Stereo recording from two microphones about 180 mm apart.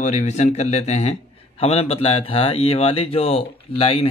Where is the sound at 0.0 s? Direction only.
40° left (ahead or behind).